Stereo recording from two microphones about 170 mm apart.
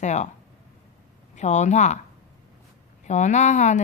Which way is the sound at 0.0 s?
45° left (ahead or behind).